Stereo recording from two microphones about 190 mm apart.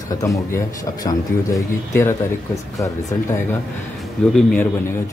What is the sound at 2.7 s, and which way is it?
Speech, 15° left (ahead or behind).